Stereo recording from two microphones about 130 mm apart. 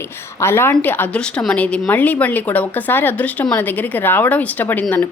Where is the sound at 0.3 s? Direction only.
20° left (ahead or behind).